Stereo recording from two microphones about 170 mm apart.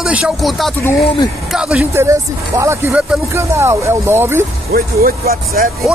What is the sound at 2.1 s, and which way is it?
Speech, 15° right (ahead or behind).